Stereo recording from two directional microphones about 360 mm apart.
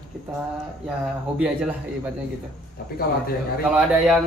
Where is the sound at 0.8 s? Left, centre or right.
Centre.